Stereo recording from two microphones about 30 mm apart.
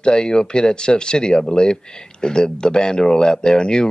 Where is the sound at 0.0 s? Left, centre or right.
Left.